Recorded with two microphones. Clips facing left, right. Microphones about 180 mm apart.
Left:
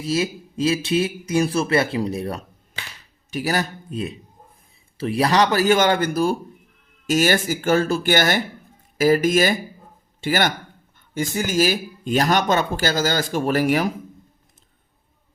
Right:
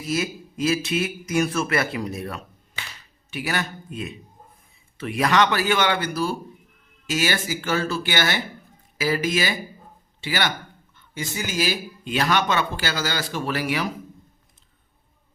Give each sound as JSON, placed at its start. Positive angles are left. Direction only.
{"t": 0.0, "sound": "speech", "side_deg": 30}